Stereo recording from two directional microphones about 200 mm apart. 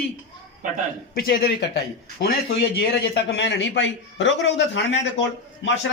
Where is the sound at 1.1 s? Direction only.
50° left (ahead or behind).